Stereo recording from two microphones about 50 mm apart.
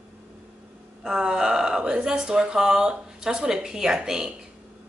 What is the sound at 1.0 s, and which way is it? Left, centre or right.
A woman's voice, centre.